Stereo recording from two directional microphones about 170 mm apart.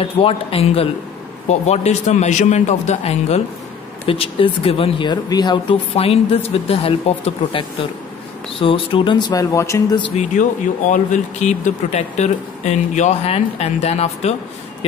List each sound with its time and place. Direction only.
0.0 s speech: 35° left (ahead or behind)
10.9 s speech: 45° left (ahead or behind)